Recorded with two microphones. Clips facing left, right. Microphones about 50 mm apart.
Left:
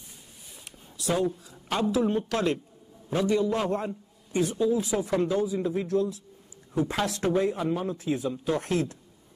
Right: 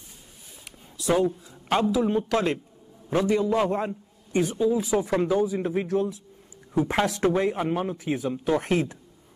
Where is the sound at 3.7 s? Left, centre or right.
Right.